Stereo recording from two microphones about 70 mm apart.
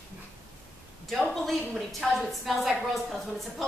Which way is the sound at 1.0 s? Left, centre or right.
Centre.